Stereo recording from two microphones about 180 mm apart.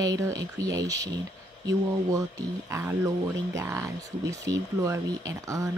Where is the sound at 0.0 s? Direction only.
20° right (ahead or behind).